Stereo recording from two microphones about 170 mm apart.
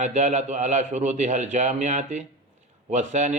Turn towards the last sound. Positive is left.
turn(degrees=-45)  # may be behind; listen again after turning